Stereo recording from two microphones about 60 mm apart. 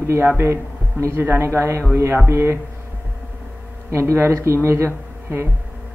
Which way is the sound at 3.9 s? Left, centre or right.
Right.